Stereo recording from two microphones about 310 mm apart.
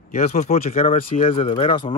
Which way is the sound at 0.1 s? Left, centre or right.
Left.